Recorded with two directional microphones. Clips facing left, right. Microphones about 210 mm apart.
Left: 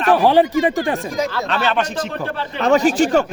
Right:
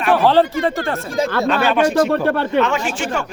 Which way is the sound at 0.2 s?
15° left (ahead or behind).